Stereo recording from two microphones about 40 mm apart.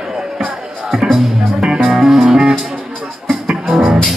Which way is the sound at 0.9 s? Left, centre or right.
Centre.